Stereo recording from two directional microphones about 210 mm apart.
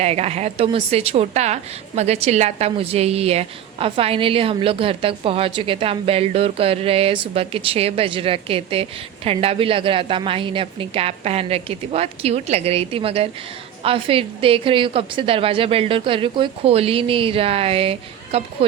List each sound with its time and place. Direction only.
0.0 s a woman's voice: 30° right (ahead or behind)